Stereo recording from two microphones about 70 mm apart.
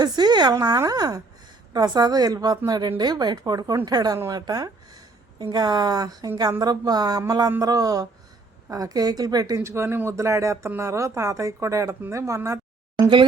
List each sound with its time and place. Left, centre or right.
0.0 s a sound: right
0.8 s a woman's voice: right
9.6 s speech: right